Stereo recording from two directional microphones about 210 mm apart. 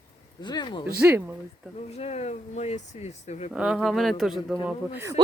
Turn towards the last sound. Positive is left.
turn(degrees=-10)  # may be behind; listen again after turning